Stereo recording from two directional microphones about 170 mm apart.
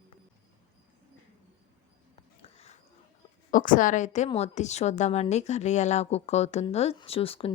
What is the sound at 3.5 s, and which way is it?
A woman's voice, 50° left (ahead or behind).